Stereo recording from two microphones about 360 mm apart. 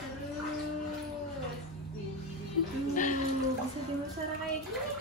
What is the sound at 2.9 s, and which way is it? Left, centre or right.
Livestock, left.